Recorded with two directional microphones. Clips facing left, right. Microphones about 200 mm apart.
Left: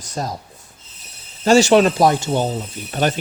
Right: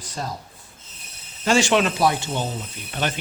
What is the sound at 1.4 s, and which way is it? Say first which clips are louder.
Speech: left 7 dB; 35° left (ahead or behind).